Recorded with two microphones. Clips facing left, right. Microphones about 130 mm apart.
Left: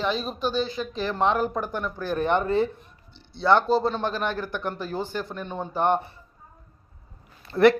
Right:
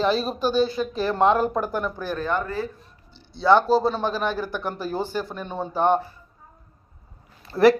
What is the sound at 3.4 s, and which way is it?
Speech, 5° right (ahead or behind).